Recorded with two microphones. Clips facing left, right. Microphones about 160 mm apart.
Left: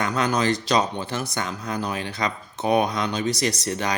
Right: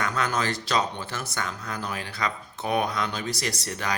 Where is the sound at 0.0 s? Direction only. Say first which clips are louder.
Left 4 dB; 15° left (ahead or behind).